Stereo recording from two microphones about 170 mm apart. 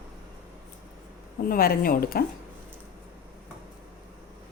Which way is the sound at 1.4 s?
60° left (ahead or behind).